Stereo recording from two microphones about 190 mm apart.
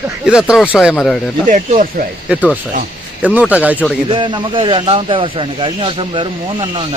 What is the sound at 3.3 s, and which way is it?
Speech, 5° right (ahead or behind).